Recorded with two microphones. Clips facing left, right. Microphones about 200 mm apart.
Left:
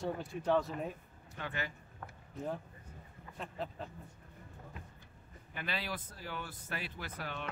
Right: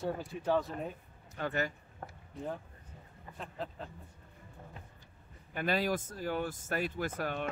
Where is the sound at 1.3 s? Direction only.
45° right (ahead or behind).